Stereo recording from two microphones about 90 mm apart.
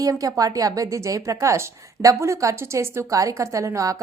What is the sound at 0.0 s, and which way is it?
A woman's voice, 40° right (ahead or behind).